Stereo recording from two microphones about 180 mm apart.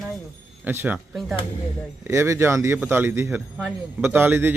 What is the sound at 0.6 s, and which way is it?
Speech, 10° right (ahead or behind).